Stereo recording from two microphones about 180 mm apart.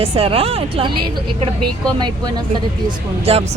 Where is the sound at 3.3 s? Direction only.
35° right (ahead or behind).